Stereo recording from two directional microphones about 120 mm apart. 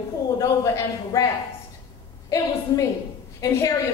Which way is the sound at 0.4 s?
30° left (ahead or behind).